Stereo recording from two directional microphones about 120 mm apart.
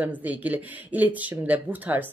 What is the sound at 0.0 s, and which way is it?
Speech, 15° right (ahead or behind).